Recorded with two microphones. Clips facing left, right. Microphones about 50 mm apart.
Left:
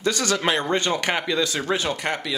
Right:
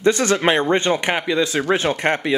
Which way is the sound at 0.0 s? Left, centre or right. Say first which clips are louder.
Right 6 dB; right.